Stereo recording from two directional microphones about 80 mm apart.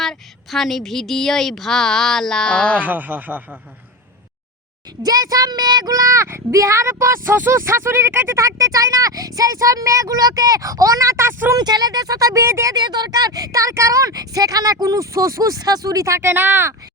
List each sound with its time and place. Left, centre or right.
0.0 s a woman's voice: centre
2.8 s speech: right
5.0 s speech: right
11.5 s speech: right
12.7 s speech: right